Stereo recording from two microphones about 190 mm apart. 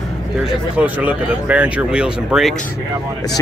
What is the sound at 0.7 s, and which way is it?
Speech, 10° right (ahead or behind).